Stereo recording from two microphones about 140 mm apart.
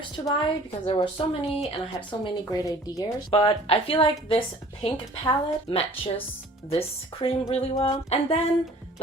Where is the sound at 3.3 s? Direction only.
40° left (ahead or behind).